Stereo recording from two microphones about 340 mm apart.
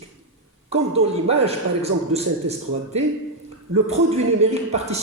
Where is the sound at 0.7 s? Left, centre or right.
Centre.